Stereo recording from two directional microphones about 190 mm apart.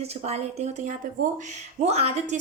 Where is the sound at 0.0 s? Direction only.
35° right (ahead or behind).